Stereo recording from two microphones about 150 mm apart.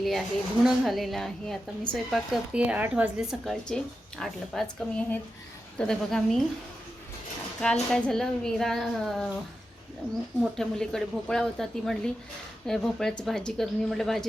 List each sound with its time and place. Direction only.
0.0 s speech: centre (ahead or behind)
7.6 s speech: 5° left (ahead or behind)
10.6 s speech: 5° left (ahead or behind)